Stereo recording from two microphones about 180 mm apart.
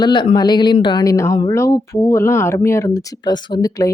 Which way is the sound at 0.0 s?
25° left (ahead or behind).